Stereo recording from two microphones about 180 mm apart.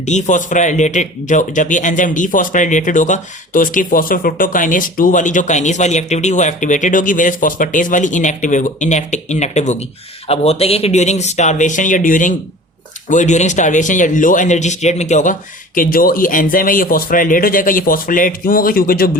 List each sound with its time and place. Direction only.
0.0 s speech: 40° left (ahead or behind)